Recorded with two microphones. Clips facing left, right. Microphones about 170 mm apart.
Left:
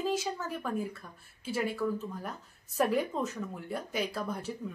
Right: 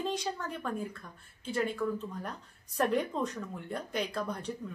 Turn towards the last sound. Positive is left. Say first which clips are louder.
# even
turn(degrees=5)  # may be behind; listen again after turning